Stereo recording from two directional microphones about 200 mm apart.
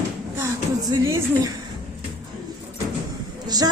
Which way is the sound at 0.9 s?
20° right (ahead or behind).